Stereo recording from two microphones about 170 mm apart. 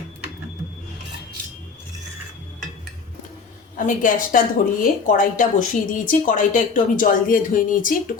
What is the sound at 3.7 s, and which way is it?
Speech, 50° left (ahead or behind).